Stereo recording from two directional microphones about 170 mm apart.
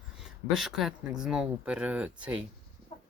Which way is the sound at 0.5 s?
Centre (ahead or behind).